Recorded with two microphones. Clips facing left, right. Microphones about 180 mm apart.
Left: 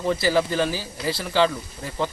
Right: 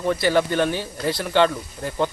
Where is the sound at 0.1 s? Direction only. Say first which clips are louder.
Right 2 dB; centre (ahead or behind).